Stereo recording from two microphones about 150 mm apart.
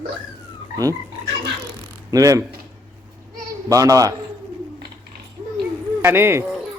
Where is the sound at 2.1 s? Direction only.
20° right (ahead or behind).